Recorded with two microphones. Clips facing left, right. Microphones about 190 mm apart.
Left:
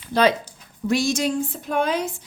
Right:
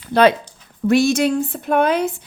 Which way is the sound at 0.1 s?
60° right (ahead or behind).